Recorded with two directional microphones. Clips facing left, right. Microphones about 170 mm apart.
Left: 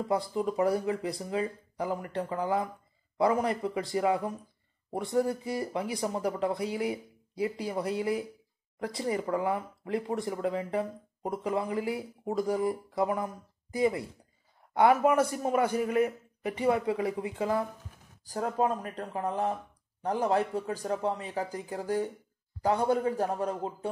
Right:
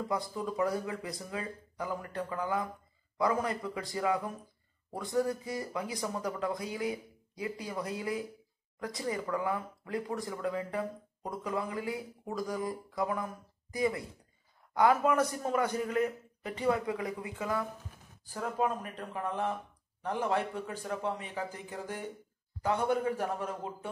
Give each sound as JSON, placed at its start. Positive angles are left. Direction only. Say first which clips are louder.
{"t": 0.1, "sound": "speech", "louder": "left 5 dB", "side_deg": 25}